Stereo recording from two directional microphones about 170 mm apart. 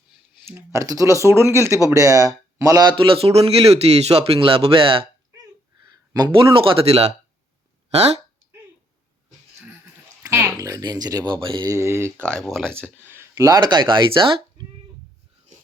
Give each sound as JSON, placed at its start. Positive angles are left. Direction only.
{"t": 0.4, "sound": "a man's voice", "side_deg": -15}
{"t": 9.6, "sound": "speech", "side_deg": -15}
{"t": 12.3, "sound": "speech", "side_deg": 0}
{"t": 13.0, "sound": "speech", "side_deg": -15}